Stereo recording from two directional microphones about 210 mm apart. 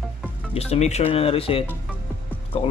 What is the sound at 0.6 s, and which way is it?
Speech, 30° left (ahead or behind).